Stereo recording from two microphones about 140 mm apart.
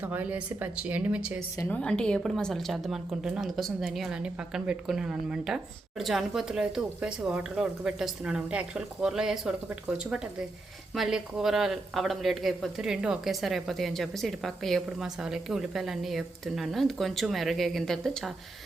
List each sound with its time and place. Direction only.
0.0 s speech: 10° right (ahead or behind)
1.7 s speech: 5° left (ahead or behind)